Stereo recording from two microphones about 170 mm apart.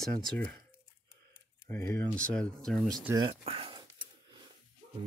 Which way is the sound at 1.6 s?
10° left (ahead or behind).